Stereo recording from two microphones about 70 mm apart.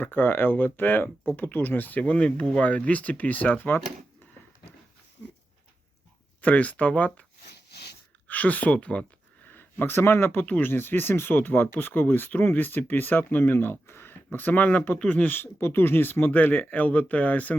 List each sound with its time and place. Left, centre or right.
0.0 s speech: left
6.4 s speech: left
8.3 s speech: left
9.5 s speech: left
15.4 s speech: left